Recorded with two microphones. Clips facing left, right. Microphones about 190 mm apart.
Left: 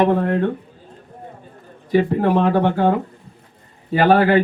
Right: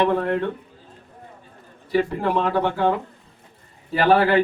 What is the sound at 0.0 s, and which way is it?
Speech, 45° left (ahead or behind).